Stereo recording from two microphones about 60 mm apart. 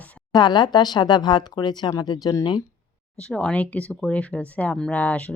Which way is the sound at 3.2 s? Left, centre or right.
Centre.